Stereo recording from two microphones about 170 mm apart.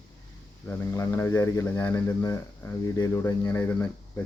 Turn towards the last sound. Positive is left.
turn(degrees=15)  # may be behind; listen again after turning